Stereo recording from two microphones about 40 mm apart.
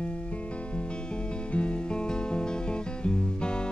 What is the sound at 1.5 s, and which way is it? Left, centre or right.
Music, left.